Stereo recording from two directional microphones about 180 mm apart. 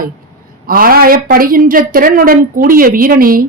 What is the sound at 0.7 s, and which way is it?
Speech, 55° right (ahead or behind).